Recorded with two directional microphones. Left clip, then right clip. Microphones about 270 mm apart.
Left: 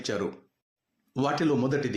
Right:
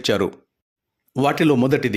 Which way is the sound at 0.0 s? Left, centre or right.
Right.